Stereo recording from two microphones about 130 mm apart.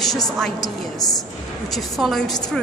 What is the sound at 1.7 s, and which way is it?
Speech, centre (ahead or behind).